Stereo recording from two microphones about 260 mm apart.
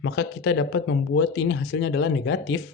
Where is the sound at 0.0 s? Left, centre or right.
Left.